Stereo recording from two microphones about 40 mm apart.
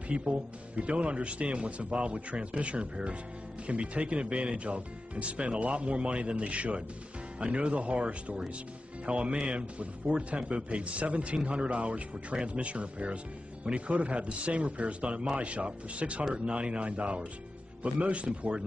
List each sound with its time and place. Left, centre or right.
0.1 s a man's voice: right